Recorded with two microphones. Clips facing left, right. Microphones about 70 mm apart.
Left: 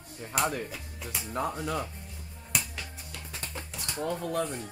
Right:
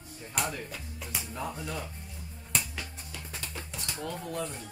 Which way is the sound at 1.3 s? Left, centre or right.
Left.